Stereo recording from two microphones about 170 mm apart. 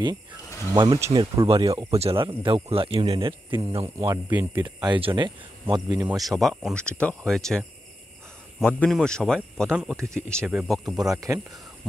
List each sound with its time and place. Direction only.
0.7 s speech: 20° right (ahead or behind)
1.5 s speech: 35° right (ahead or behind)
4.0 s speech: 15° right (ahead or behind)
4.6 s speech: 25° right (ahead or behind)
6.0 s a man's voice: centre (ahead or behind)
9.9 s speech: 15° right (ahead or behind)
10.3 s speech: 5° right (ahead or behind)
11.0 s speech: 20° right (ahead or behind)